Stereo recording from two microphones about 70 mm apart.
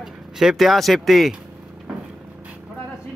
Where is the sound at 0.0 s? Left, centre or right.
Centre.